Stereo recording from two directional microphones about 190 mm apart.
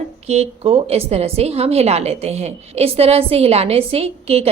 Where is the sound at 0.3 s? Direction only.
30° right (ahead or behind).